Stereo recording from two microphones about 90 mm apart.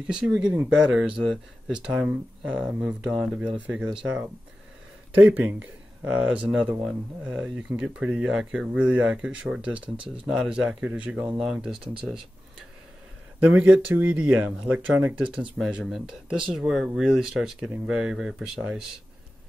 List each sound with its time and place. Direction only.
0.0 s speech: 15° right (ahead or behind)
13.4 s speech: 15° right (ahead or behind)
15.8 s speech: 5° right (ahead or behind)